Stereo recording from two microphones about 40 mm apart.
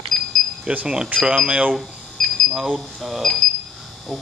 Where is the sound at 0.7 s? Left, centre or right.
Right.